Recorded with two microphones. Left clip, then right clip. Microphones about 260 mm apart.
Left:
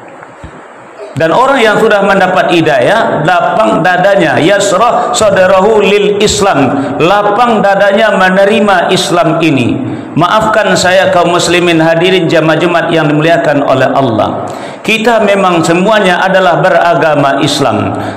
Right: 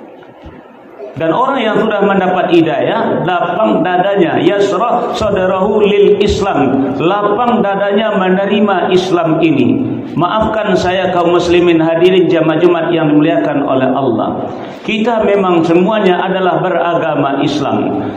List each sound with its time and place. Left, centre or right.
1.3 s a man's voice: left